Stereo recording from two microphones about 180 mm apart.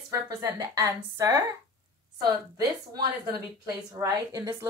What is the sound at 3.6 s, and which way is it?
A woman's voice, 20° right (ahead or behind).